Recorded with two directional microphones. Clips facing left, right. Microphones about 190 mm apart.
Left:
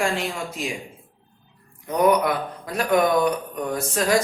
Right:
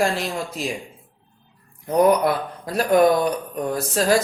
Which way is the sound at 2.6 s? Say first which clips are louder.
Right 4 dB; 35° right (ahead or behind).